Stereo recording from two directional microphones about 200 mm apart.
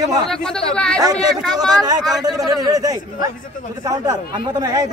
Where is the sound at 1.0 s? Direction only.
20° right (ahead or behind).